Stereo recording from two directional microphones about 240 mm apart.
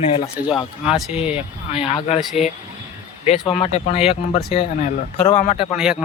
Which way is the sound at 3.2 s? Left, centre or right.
Left.